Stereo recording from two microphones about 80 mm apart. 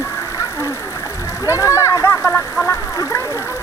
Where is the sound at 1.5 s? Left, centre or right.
Left.